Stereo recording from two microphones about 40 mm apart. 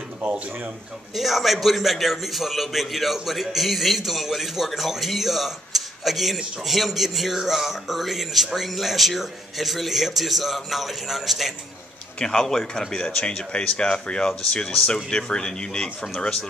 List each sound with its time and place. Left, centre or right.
1.1 s a man's voice: centre
12.2 s speech: centre